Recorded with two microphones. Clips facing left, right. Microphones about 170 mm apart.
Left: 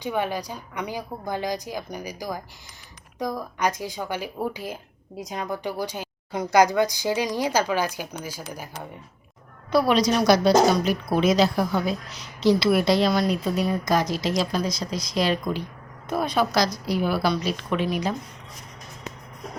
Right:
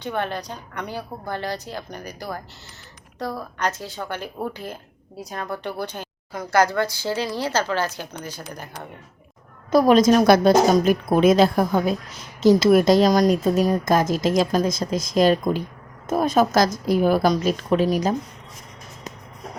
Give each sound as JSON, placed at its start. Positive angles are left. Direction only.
{"t": 0.0, "sound": "speech", "side_deg": 10}
{"t": 9.7, "sound": "speech", "side_deg": -45}